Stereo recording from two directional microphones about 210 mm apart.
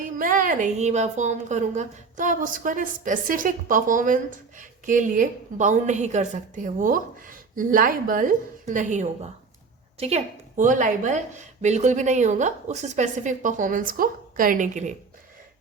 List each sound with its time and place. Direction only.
0.0 s a woman's voice: 40° right (ahead or behind)